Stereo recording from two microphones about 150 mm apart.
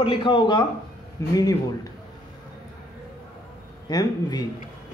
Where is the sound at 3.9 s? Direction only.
25° left (ahead or behind).